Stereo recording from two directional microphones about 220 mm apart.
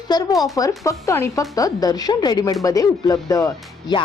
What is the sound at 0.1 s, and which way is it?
A woman's voice, 15° left (ahead or behind).